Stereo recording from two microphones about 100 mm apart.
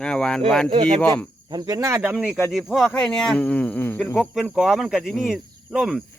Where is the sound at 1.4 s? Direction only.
40° right (ahead or behind).